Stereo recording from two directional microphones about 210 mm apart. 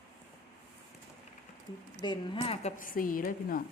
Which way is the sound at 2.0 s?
20° left (ahead or behind).